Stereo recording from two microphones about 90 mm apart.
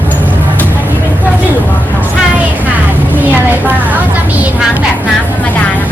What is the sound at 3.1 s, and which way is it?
Vehicle, 20° right (ahead or behind).